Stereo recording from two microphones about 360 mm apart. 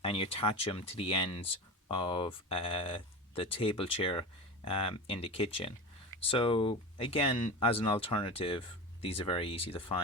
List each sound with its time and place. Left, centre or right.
0.0 s speech: centre